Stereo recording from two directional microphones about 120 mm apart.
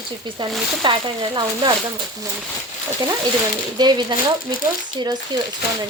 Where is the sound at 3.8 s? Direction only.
35° right (ahead or behind).